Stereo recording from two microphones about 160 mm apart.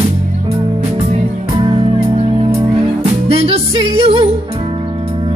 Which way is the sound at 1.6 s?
30° right (ahead or behind).